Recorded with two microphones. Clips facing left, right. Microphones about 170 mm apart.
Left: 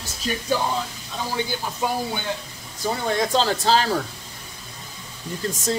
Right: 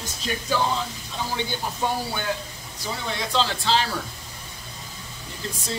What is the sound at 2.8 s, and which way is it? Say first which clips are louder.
Speech: left 7 dB; 45° left (ahead or behind).